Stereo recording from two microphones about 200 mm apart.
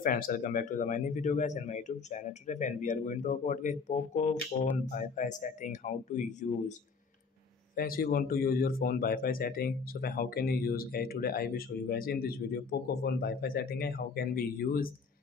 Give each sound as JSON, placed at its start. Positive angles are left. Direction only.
{"t": 0.0, "sound": "speech", "side_deg": 45}
{"t": 7.7, "sound": "speech", "side_deg": 45}